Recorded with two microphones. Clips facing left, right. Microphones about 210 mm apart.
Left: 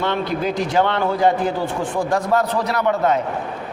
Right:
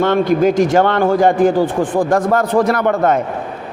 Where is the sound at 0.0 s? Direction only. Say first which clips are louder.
Right 9 dB; 50° right (ahead or behind).